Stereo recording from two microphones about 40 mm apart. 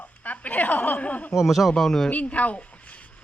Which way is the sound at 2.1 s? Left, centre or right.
Left.